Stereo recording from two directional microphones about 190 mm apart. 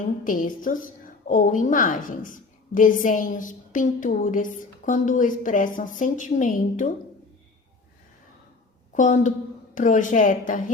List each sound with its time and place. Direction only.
0.3 s a woman's voice: 45° left (ahead or behind)
8.9 s a woman's voice: 40° left (ahead or behind)